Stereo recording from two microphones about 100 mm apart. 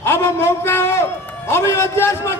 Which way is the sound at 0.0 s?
25° left (ahead or behind).